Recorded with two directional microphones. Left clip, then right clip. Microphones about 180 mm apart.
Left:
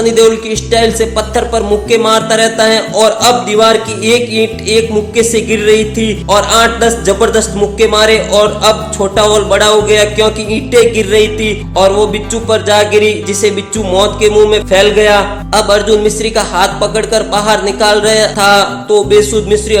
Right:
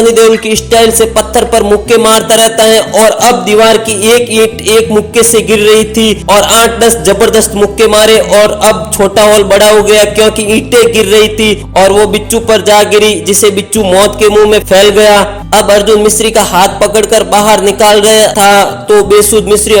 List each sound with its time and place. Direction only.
0.1 s music: 30° right (ahead or behind)